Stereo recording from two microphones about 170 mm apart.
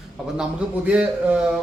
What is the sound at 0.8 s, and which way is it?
Speech, 10° right (ahead or behind).